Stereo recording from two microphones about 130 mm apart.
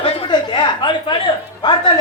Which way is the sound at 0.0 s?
45° left (ahead or behind).